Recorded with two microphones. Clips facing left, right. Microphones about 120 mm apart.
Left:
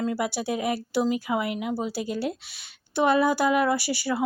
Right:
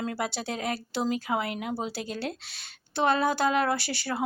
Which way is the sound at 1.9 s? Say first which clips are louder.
Left 5 dB; 10° left (ahead or behind).